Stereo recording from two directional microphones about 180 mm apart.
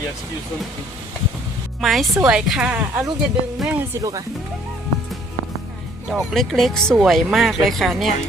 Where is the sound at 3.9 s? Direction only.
20° right (ahead or behind).